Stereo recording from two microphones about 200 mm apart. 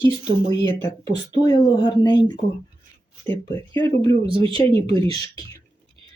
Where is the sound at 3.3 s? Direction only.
25° right (ahead or behind).